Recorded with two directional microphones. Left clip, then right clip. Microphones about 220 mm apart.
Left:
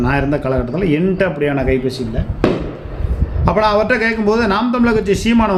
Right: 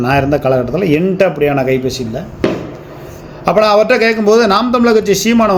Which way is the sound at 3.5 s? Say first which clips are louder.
Right 4 dB; 20° right (ahead or behind).